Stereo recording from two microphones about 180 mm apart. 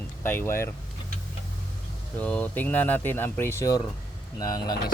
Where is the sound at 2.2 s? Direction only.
10° left (ahead or behind).